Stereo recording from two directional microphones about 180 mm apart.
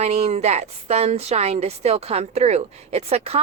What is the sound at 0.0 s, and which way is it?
A woman's voice, 35° right (ahead or behind).